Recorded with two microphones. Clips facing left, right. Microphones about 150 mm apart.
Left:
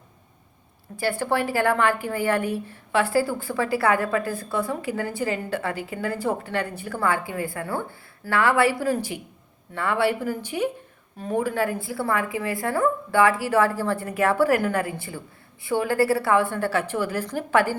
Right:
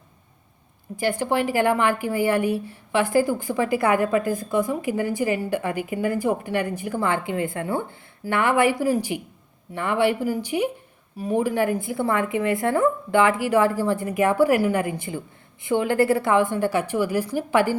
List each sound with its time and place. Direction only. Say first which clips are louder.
0.9 s a woman's voice: right 2 dB; 15° right (ahead or behind)